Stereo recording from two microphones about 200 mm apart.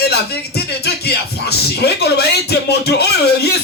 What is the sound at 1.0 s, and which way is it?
Speech, 55° left (ahead or behind).